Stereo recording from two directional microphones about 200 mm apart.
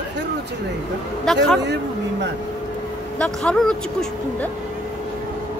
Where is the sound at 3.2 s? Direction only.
5° left (ahead or behind).